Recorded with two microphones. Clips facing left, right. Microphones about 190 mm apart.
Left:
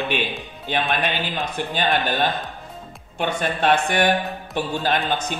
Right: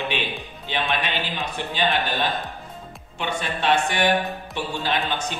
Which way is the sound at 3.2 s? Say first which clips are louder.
Left 4 dB; 50° left (ahead or behind).